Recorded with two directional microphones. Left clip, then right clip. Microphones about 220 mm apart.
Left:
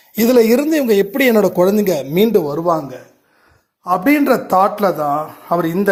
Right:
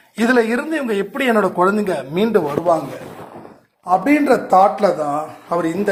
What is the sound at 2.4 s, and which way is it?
Speech, 35° left (ahead or behind).